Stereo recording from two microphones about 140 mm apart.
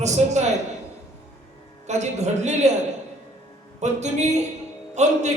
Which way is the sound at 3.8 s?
55° right (ahead or behind).